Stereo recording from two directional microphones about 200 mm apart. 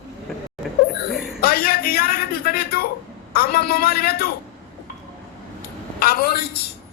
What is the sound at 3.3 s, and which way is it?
Speech, 50° left (ahead or behind).